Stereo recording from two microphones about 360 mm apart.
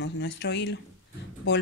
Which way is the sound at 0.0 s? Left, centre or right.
Left.